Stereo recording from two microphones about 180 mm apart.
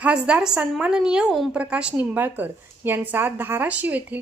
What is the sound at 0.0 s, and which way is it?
A woman's voice, 5° right (ahead or behind).